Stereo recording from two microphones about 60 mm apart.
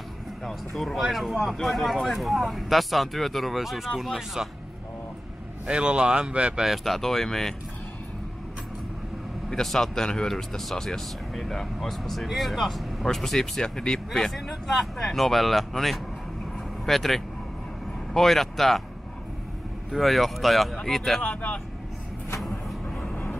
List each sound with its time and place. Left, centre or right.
0.4 s speech: centre
5.7 s speech: centre
6.6 s speech: centre
9.5 s speech: centre
19.9 s speech: centre
21.2 s speech: left
22.4 s vehicle: centre